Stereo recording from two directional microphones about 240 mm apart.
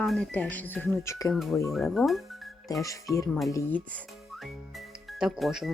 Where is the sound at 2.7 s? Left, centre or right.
Centre.